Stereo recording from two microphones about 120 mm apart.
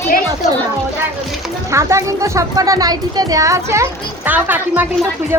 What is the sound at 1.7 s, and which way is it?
A child's voice, 25° right (ahead or behind).